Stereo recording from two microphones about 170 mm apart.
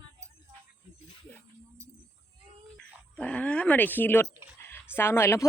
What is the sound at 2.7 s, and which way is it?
Speech, 5° left (ahead or behind).